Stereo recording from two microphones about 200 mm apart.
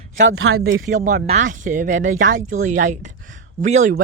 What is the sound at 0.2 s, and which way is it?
Speech, 80° right.